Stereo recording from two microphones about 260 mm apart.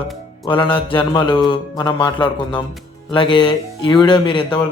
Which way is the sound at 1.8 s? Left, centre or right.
Centre.